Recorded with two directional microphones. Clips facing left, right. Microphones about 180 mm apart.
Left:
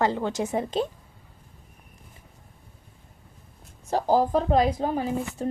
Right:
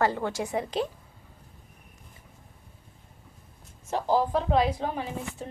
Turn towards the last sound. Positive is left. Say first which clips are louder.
# left 6 dB
turn(degrees=40)  # may be behind; listen again after turning